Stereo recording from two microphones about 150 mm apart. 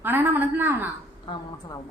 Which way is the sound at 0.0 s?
15° right (ahead or behind).